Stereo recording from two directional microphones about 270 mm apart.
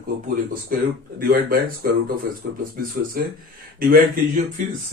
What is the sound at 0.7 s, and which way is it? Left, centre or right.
Speech, right.